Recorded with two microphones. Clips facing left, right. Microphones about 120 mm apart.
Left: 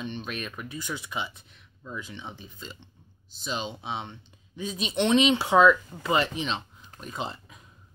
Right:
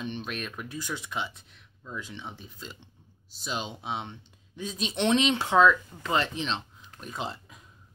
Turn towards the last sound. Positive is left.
turn(degrees=0)  # may be behind; listen again after turning